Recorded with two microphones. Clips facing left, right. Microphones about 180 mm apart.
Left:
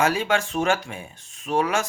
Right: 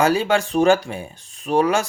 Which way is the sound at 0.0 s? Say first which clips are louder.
Right 4 dB; 35° right (ahead or behind).